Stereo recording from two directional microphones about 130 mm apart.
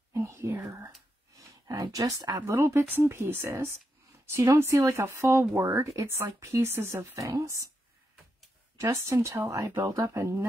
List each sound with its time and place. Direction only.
0.1 s whispering: 20° right (ahead or behind)
0.7 s speech: 25° right (ahead or behind)
8.7 s speech: 20° right (ahead or behind)